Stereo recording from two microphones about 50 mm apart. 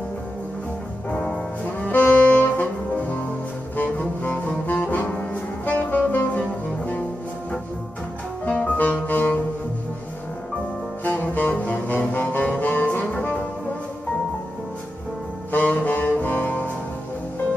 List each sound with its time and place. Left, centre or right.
1.1 s music: centre
1.8 s saxophone: left
3.7 s music: left
8.5 s music: left
11.1 s music: left
11.4 s saxophone: left
15.5 s music: left